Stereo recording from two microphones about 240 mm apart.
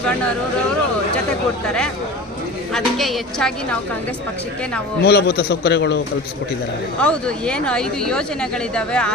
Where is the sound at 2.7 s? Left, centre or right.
Centre.